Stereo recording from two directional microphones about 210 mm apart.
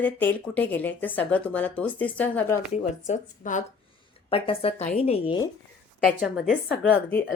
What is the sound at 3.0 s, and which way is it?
Speech, 35° left (ahead or behind).